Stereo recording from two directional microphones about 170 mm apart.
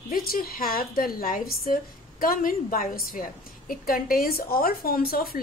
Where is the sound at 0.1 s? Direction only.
60° left (ahead or behind).